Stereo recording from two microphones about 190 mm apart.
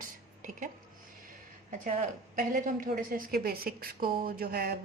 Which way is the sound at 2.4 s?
45° right (ahead or behind).